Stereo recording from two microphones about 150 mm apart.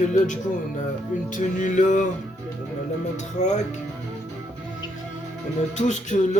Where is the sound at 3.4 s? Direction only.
50° left (ahead or behind).